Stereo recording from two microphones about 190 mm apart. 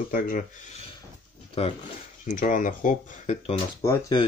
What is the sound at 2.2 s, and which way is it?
Speech, 45° left (ahead or behind).